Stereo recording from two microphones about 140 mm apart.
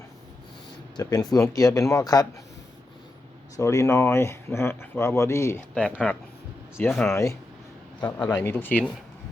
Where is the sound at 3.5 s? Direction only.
20° left (ahead or behind).